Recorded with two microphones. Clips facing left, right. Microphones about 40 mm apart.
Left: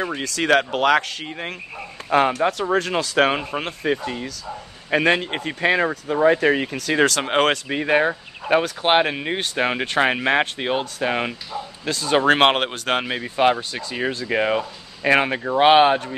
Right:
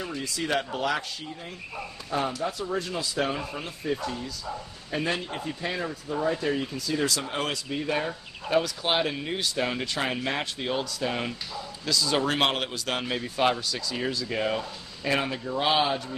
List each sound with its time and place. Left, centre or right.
0.0 s speech: left
2.0 s speech: left
2.4 s speech: left
13.1 s speech: left